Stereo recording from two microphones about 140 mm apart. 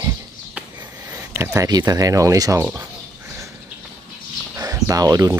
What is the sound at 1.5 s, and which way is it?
Speech, 25° right (ahead or behind).